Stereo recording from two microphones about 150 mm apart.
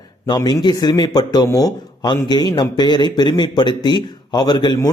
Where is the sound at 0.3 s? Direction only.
30° left (ahead or behind).